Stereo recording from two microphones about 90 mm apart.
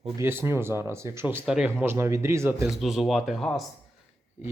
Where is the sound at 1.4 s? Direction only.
5° right (ahead or behind).